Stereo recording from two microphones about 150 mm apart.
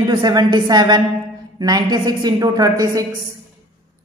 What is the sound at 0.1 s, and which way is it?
A man's voice, 30° right (ahead or behind).